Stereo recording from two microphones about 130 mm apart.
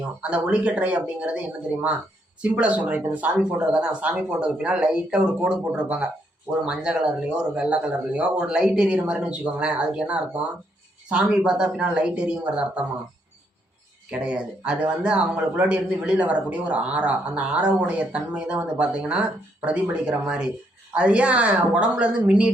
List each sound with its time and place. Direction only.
0.2 s speech: 10° right (ahead or behind)
14.1 s speech: 10° right (ahead or behind)